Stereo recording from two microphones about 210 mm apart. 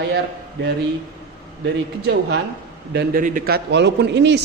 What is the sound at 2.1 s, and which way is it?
Speech, 55° right (ahead or behind).